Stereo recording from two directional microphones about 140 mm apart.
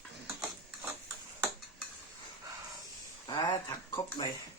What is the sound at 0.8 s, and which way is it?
Tick-tock, 15° right (ahead or behind).